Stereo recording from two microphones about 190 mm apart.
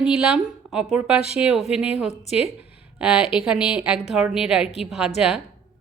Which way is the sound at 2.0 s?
35° left (ahead or behind).